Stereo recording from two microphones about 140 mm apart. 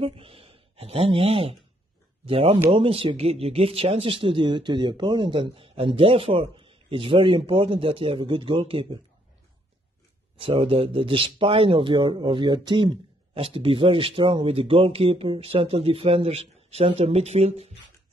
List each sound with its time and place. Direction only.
0.0 s a sound: 40° right (ahead or behind)
2.2 s a man's voice: 40° right (ahead or behind)
10.4 s a man's voice: 40° right (ahead or behind)